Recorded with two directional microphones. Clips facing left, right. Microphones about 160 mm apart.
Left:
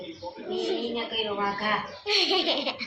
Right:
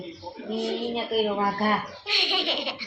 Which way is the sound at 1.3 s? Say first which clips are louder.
Right 4 dB; 40° right (ahead or behind).